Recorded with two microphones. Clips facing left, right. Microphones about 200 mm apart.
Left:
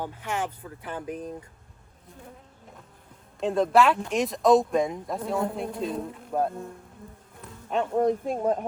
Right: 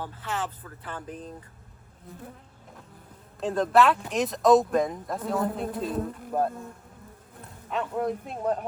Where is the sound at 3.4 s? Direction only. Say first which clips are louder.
Left 1 dB; centre (ahead or behind).